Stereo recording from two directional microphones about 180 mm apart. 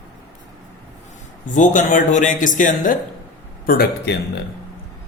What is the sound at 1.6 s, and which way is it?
A man's voice, 45° left (ahead or behind).